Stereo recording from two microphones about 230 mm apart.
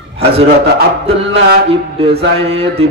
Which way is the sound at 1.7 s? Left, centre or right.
Right.